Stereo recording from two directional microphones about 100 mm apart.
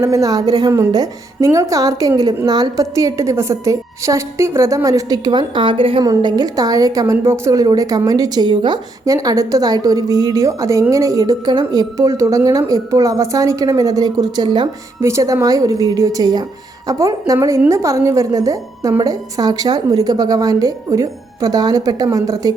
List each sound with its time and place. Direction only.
0.0 s a woman's voice: 35° right (ahead or behind); by 6.0 s 60° right (ahead or behind)
6.0 s a woman's voice: 45° right (ahead or behind)
9.0 s a woman's voice: 35° right (ahead or behind)
15.0 s a woman's voice: 30° right (ahead or behind)